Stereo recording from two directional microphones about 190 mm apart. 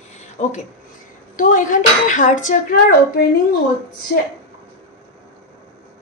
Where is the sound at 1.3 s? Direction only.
45° left (ahead or behind).